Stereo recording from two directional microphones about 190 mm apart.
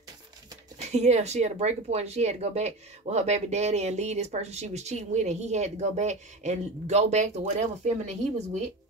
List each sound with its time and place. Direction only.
0.7 s speech: 35° right (ahead or behind)